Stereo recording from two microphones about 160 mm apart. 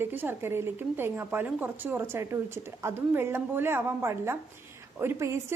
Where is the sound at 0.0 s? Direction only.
10° right (ahead or behind).